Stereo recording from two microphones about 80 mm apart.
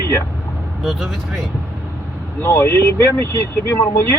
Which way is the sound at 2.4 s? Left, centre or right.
Left.